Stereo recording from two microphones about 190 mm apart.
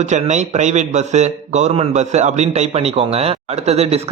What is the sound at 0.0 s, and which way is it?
A man's voice, 40° right (ahead or behind).